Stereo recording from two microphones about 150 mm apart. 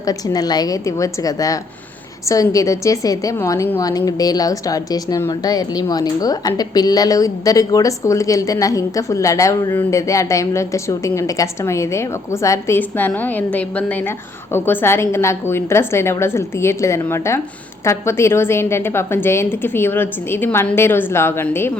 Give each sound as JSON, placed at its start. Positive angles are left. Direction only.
{"t": 0.0, "sound": "a woman's voice", "side_deg": 25}